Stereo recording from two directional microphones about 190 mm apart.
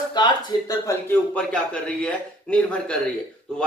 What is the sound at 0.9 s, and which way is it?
A man's voice, 10° left (ahead or behind).